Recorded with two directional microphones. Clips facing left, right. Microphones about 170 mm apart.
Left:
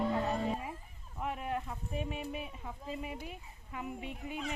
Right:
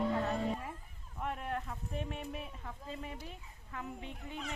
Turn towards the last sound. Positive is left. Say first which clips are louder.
# left 4 dB
turn(degrees=10)  # may be behind; listen again after turning